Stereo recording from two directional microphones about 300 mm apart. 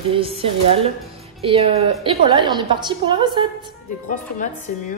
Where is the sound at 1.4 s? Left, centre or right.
Centre.